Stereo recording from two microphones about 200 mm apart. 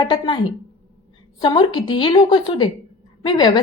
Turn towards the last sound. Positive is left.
turn(degrees=20)  # may be behind; listen again after turning